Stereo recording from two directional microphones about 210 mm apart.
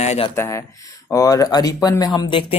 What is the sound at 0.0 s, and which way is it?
Speech, 30° left (ahead or behind).